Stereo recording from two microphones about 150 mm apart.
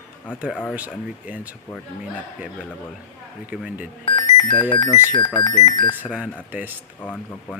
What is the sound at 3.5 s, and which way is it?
Speech, 10° right (ahead or behind).